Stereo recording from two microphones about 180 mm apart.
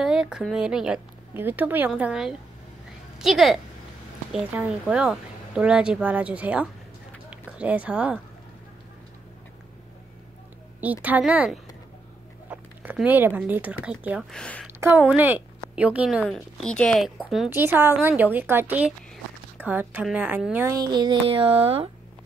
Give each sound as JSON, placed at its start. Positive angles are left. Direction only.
{"t": 0.0, "sound": "a woman's voice", "side_deg": -5}
{"t": 10.8, "sound": "a woman's voice", "side_deg": -10}
{"t": 12.4, "sound": "a sound", "side_deg": -10}
{"t": 13.4, "sound": "a woman's voice", "side_deg": -10}
{"t": 14.3, "sound": "a woman's voice", "side_deg": 5}
{"t": 14.8, "sound": "a woman's voice", "side_deg": -10}
{"t": 17.5, "sound": "a woman's voice", "side_deg": -10}
{"t": 20.9, "sound": "speech", "side_deg": -25}